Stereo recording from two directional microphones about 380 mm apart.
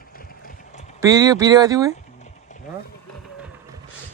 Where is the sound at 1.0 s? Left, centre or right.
Centre.